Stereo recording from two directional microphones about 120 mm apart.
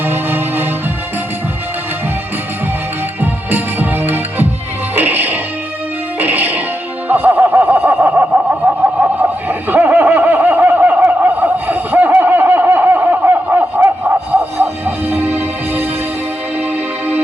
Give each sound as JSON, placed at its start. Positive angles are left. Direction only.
{"t": 0.0, "sound": "music", "side_deg": -20}
{"t": 3.2, "sound": "music", "side_deg": -15}
{"t": 7.1, "sound": "a sound", "side_deg": -15}
{"t": 14.3, "sound": "music", "side_deg": -20}